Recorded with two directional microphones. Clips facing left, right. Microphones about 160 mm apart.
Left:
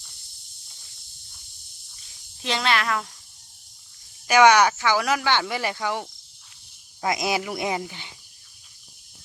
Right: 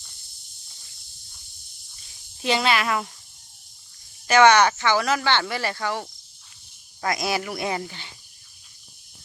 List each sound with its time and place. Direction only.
2.4 s speech: 5° right (ahead or behind)
4.3 s speech: 10° left (ahead or behind)